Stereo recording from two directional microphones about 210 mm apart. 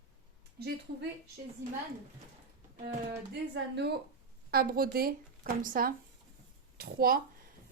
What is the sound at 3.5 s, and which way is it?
A woman's voice, 55° right (ahead or behind).